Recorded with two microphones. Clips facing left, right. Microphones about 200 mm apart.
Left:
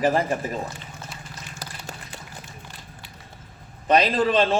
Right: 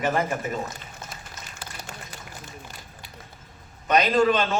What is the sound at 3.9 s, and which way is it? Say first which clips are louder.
Speech: even; 30° left (ahead or behind).